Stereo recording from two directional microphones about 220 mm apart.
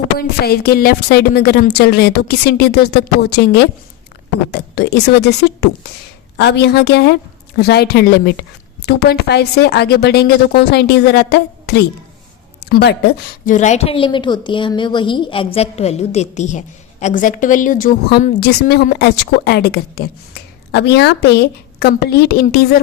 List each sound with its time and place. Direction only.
0.2 s a woman's voice: 45° left (ahead or behind)
13.4 s a woman's voice: 35° left (ahead or behind)